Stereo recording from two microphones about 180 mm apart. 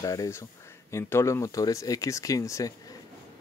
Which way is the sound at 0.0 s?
20° left (ahead or behind).